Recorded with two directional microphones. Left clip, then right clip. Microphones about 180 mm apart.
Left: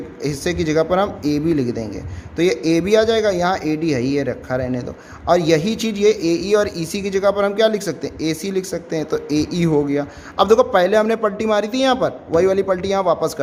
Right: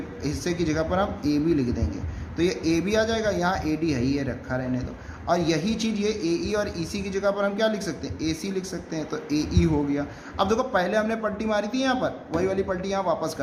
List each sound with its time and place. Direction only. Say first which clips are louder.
0.2 s a man's voice: left 6 dB; 50° left (ahead or behind)